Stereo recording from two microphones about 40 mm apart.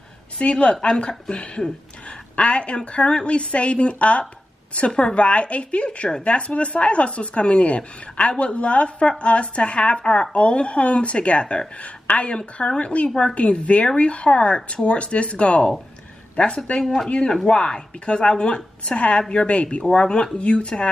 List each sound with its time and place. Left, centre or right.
0.4 s a woman's voice: left